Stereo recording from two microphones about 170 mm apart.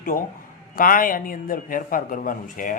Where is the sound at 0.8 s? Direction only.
55° left (ahead or behind).